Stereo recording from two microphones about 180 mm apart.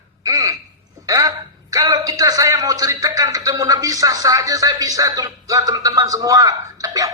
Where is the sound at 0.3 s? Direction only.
20° right (ahead or behind).